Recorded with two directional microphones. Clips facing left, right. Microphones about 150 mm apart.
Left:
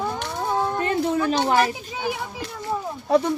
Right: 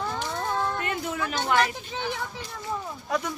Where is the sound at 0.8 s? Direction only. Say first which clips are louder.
Left 8 dB; 35° left (ahead or behind).